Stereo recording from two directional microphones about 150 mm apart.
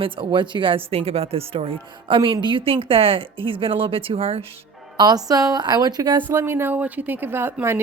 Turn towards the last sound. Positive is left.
turn(degrees=-15)  # may be behind; listen again after turning